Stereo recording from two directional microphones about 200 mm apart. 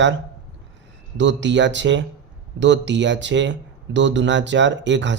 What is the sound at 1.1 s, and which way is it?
Speech, 65° right (ahead or behind).